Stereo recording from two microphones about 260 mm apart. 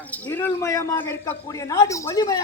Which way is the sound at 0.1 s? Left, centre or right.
Centre.